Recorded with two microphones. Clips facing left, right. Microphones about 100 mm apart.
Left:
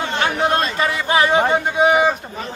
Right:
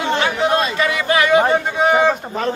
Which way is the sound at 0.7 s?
30° left (ahead or behind).